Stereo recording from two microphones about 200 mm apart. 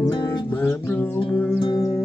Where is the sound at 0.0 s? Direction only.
15° left (ahead or behind).